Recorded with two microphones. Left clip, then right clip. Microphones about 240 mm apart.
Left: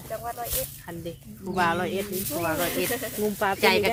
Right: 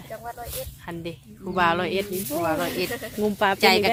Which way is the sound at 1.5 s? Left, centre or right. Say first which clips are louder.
Right 3 dB; right.